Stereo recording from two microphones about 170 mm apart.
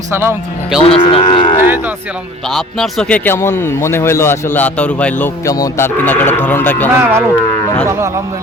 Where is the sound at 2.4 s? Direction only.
Centre (ahead or behind).